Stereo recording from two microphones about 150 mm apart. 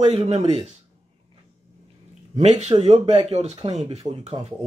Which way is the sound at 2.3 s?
45° right (ahead or behind).